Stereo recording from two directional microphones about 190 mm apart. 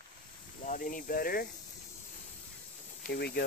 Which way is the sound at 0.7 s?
45° left (ahead or behind).